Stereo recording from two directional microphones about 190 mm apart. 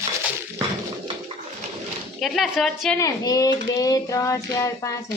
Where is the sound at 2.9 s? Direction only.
20° left (ahead or behind).